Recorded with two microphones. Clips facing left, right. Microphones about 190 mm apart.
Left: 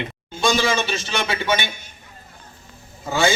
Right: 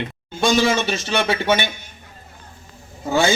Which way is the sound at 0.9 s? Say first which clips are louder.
Right 4 dB; 55° right (ahead or behind).